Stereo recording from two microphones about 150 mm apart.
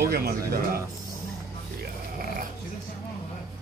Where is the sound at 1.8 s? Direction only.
75° right (ahead or behind).